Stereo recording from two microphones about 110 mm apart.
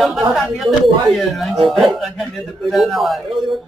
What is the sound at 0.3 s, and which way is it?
A man's voice, centre (ahead or behind).